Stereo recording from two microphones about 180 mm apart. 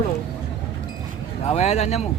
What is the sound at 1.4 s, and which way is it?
Speech, 35° left (ahead or behind).